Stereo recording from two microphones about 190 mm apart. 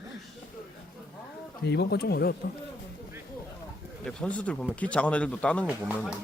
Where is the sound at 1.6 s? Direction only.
60° left (ahead or behind).